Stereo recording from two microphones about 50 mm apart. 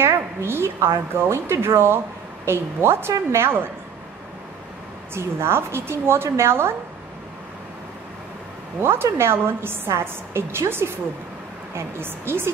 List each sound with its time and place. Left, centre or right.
0.0 s a woman's voice: right
5.1 s a woman's voice: right
8.8 s a woman's voice: right